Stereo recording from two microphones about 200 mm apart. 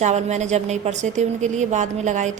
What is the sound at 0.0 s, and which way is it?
A woman's voice, 35° right (ahead or behind).